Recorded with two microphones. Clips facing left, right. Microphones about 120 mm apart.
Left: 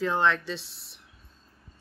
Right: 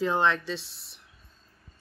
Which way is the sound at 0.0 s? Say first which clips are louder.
Even; 10° right (ahead or behind).